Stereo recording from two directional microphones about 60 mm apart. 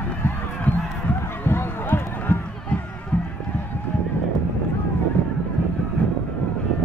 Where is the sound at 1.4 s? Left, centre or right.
Left.